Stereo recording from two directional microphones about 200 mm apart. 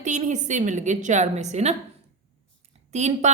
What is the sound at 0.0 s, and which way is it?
A woman's voice, 35° right (ahead or behind).